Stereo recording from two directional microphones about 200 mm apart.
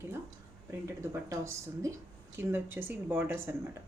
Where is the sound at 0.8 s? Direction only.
15° right (ahead or behind).